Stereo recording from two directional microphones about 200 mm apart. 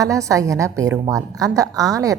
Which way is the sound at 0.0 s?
15° right (ahead or behind).